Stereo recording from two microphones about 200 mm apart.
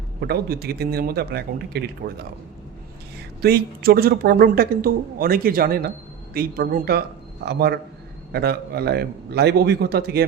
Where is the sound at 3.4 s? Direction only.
50° right (ahead or behind).